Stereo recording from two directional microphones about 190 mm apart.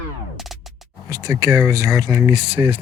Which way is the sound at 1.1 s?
15° right (ahead or behind).